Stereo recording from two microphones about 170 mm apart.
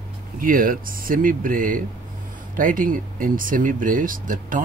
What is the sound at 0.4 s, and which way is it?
Speech, 55° right (ahead or behind).